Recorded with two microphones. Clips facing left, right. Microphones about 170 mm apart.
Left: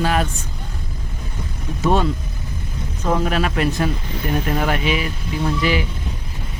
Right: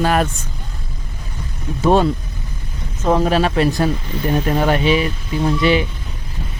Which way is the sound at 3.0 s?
30° right (ahead or behind).